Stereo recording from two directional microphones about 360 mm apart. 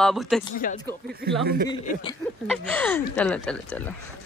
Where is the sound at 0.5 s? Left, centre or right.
Left.